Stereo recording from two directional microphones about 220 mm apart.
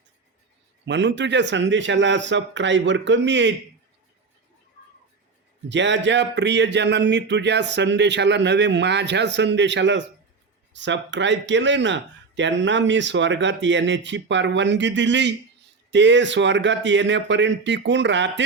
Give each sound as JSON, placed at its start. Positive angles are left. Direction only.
{"t": 0.9, "sound": "speech", "side_deg": -55}
{"t": 5.6, "sound": "speech", "side_deg": -55}